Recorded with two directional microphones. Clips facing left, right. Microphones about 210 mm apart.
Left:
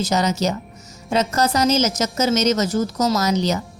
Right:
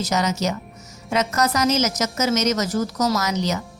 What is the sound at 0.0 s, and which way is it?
A woman's voice, 30° left (ahead or behind).